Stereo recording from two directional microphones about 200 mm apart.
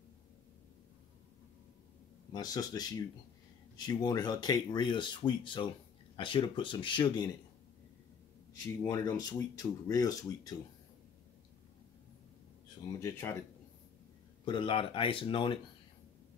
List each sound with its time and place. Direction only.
2.3 s speech: 20° left (ahead or behind)
8.8 s speech: 15° left (ahead or behind)
13.0 s speech: 15° left (ahead or behind)
14.4 s speech: 25° left (ahead or behind)